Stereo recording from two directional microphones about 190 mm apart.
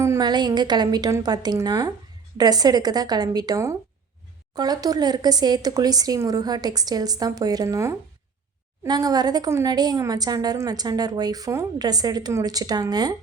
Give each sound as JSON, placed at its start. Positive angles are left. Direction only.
{"t": 0.0, "sound": "a woman's voice", "side_deg": -20}